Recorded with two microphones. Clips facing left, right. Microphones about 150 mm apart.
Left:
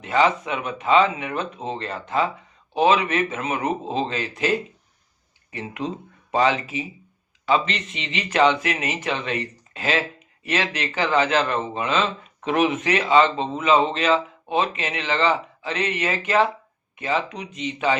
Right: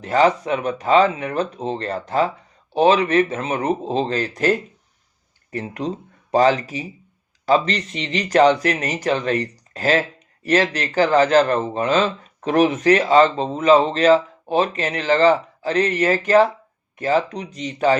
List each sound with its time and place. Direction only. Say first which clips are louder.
0.0 s speech: right 3 dB; 35° right (ahead or behind)